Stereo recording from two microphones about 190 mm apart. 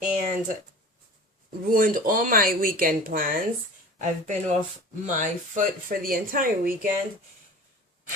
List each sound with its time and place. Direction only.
0.0 s speech: 45° right (ahead or behind)
1.7 s speech: 45° right (ahead or behind)